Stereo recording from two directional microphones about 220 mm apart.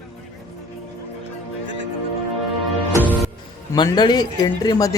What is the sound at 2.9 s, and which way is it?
Music, 5° right (ahead or behind).